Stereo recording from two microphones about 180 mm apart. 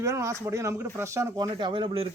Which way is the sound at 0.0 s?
15° right (ahead or behind).